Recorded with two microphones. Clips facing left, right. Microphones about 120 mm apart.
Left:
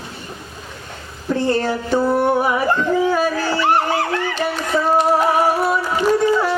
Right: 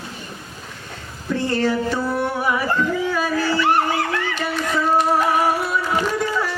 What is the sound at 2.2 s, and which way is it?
Dog, 30° left (ahead or behind).